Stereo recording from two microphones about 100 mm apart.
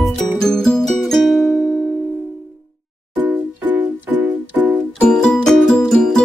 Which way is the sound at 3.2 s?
20° right (ahead or behind).